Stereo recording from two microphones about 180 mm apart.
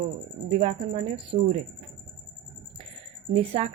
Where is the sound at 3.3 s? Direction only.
35° right (ahead or behind).